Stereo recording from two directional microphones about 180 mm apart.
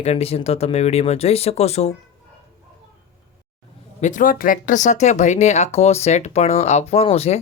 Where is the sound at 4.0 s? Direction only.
45° left (ahead or behind).